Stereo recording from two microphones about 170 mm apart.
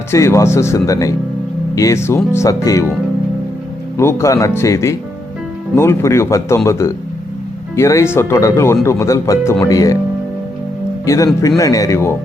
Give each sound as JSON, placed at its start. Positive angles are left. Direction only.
{"t": 0.1, "sound": "speech", "side_deg": 15}
{"t": 3.9, "sound": "speech", "side_deg": 15}
{"t": 11.0, "sound": "speech", "side_deg": 20}